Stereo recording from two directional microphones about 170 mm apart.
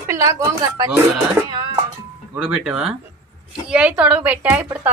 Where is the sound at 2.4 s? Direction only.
5° right (ahead or behind).